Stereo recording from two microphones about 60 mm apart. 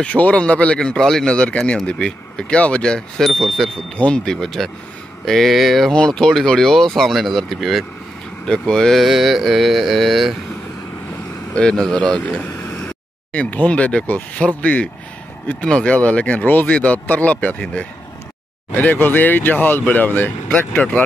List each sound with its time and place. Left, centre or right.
0.0 s speech: left
0.7 s speech: centre
3.3 s mantra: centre
3.9 s speech: centre
5.2 s mantra: centre
5.9 s speech: centre
8.5 s speech: centre
9.0 s mantra: centre
11.5 s speech: centre